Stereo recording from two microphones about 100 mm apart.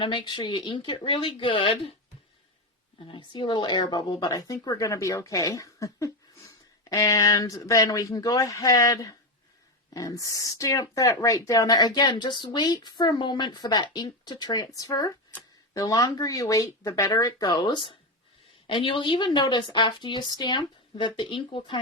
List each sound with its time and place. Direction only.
0.0 s speech: 55° left (ahead or behind)
3.1 s a woman's voice: 55° left (ahead or behind)